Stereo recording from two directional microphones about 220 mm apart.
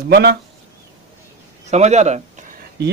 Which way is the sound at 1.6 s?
30° right (ahead or behind).